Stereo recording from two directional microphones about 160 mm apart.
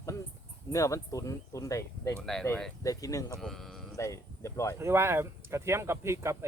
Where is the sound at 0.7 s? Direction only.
20° left (ahead or behind).